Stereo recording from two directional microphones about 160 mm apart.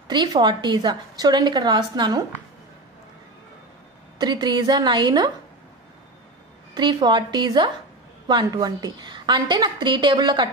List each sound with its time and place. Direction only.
0.1 s a woman's voice: 30° right (ahead or behind)
4.2 s a woman's voice: 25° right (ahead or behind)
6.7 s a woman's voice: 30° right (ahead or behind)